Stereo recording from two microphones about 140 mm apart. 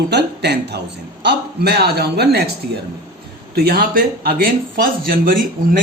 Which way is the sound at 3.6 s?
90° right.